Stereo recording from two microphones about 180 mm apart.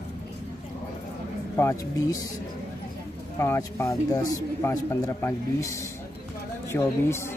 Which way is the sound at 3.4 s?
15° left (ahead or behind).